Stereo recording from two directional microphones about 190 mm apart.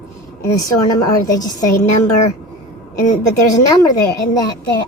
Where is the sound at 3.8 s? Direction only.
20° left (ahead or behind).